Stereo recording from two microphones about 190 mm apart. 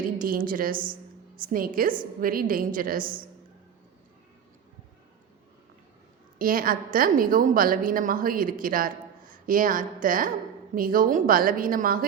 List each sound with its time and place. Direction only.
0.2 s a woman's voice: 50° right (ahead or behind)
6.4 s a woman's voice: 50° right (ahead or behind)